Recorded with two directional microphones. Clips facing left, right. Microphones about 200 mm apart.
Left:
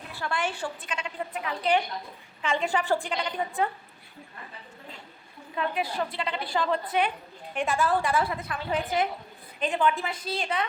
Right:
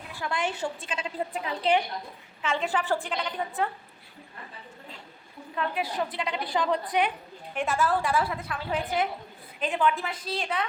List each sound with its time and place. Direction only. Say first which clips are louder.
0.1 s a woman's voice: even; 15° right (ahead or behind)
2.4 s a woman's voice: left 1 dB; 5° right (ahead or behind)
5.8 s a woman's voice: even; 15° right (ahead or behind)
7.5 s a woman's voice: left 1 dB; 5° right (ahead or behind)